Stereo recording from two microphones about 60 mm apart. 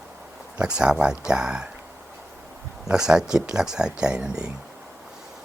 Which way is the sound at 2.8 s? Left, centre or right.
Centre.